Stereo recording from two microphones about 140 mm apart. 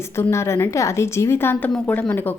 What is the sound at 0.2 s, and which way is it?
A woman's voice, 20° left (ahead or behind).